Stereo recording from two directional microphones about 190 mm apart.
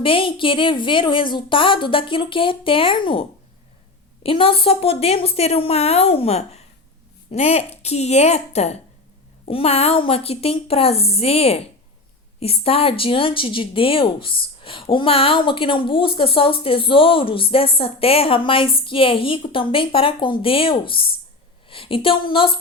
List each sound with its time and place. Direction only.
0.0 s a woman's voice: 30° left (ahead or behind)